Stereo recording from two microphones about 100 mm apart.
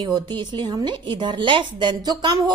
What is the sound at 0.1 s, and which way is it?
A woman's voice, 45° right (ahead or behind).